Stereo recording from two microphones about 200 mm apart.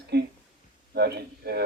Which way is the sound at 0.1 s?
55° right (ahead or behind).